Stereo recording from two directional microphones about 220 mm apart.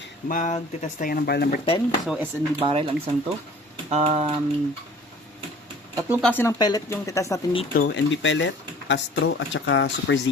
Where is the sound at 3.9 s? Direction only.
30° right (ahead or behind).